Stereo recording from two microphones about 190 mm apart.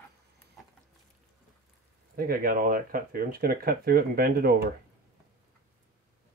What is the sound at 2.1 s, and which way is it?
Speech, 50° right (ahead or behind).